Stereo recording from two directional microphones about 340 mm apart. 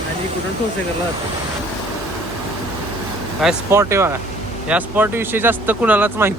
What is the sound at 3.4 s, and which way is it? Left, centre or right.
Speech, centre.